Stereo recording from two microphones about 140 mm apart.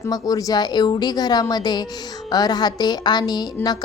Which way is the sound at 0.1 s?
25° left (ahead or behind).